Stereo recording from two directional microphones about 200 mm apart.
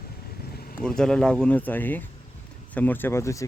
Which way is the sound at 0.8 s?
5° left (ahead or behind).